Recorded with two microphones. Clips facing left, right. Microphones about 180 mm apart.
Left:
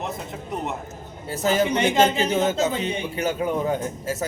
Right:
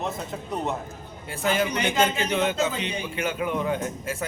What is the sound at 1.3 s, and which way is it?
Speech, 40° left (ahead or behind).